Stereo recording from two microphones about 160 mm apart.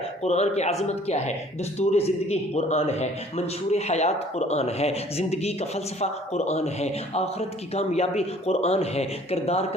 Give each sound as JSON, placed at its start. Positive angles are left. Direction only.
{"t": 0.2, "sound": "a man's voice", "side_deg": 40}